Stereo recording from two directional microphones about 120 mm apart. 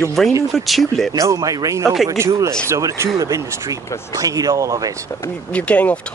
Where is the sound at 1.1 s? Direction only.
25° right (ahead or behind).